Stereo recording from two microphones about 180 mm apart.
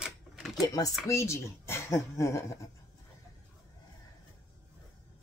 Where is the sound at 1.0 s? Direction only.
15° left (ahead or behind).